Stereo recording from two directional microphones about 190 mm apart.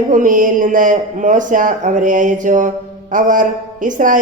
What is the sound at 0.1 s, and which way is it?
A man's voice, 45° right (ahead or behind).